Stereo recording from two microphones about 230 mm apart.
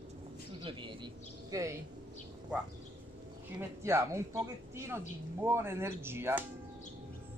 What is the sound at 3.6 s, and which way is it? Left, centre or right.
Speech, centre.